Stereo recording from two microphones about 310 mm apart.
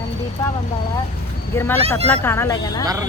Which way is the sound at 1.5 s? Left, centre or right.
Centre.